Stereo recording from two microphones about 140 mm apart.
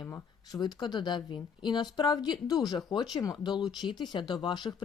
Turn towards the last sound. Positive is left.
turn(degrees=30)  # may be behind; listen again after turning